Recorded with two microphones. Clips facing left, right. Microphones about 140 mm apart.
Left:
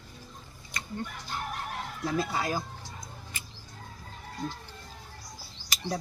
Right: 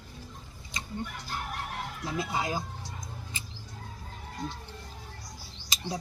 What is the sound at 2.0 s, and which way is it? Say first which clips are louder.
Speech: left 3 dB; 15° right (ahead or behind).